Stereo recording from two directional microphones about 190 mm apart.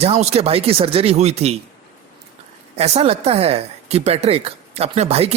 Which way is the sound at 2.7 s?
35° right (ahead or behind).